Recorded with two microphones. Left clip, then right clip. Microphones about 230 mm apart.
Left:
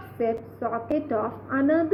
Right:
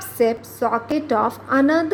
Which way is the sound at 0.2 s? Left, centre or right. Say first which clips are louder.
Right 8 dB; right.